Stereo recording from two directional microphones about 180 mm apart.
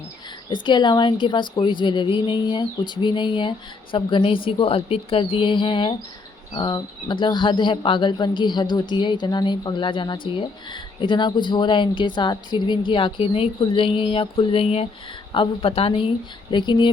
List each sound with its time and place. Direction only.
0.5 s speech: 25° left (ahead or behind)